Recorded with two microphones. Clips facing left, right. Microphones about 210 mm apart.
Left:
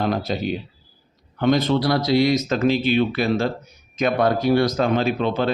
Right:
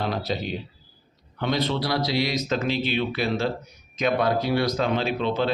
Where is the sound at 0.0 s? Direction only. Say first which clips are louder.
Left 5 dB; 50° left (ahead or behind).